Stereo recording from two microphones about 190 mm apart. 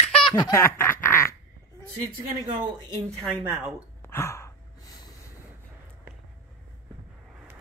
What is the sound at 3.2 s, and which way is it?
Speech, centre (ahead or behind).